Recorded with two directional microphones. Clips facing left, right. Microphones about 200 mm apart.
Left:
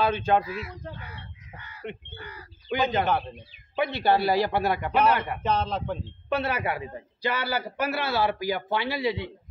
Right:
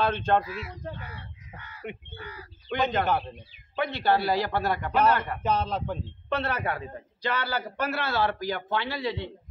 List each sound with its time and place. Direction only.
0.0 s a man's voice: 5° left (ahead or behind)
5.4 s speech: 5° right (ahead or behind)
6.3 s a man's voice: 10° left (ahead or behind)